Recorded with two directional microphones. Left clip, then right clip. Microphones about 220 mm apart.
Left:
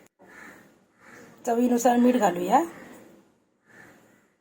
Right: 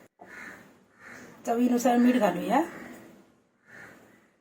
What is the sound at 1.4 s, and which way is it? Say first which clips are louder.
A woman's voice: left 3 dB; 40° left (ahead or behind).